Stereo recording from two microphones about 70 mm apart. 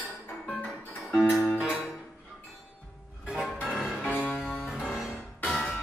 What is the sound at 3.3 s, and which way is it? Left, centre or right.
Music, centre.